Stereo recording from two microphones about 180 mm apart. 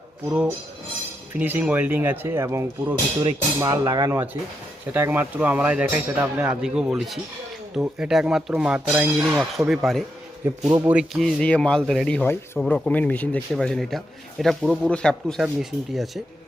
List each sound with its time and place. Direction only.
0.3 s speech: 10° right (ahead or behind)
10.7 s speech: 15° right (ahead or behind)
10.9 s speech: centre (ahead or behind)